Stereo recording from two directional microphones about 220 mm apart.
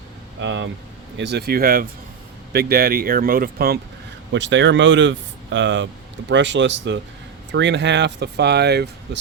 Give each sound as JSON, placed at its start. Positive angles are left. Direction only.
{"t": 0.3, "sound": "speech", "side_deg": -60}
{"t": 4.3, "sound": "speech", "side_deg": -55}